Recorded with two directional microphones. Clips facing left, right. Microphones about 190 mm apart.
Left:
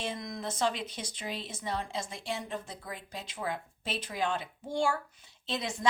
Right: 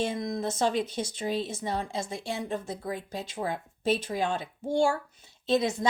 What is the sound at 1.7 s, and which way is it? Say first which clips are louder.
Speech: right 1 dB; 45° right (ahead or behind).